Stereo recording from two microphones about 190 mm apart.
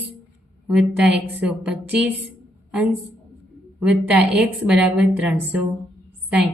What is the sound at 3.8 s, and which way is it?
A woman's voice, 5° right (ahead or behind).